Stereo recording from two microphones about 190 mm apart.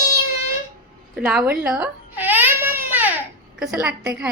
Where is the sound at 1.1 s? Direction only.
5° right (ahead or behind).